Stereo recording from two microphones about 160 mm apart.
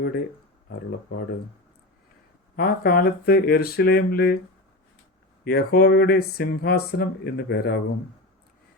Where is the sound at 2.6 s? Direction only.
70° left (ahead or behind).